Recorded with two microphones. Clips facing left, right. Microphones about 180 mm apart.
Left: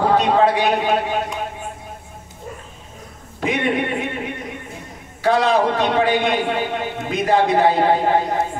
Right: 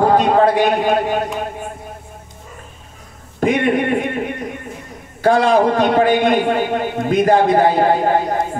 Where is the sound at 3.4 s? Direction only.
45° right (ahead or behind).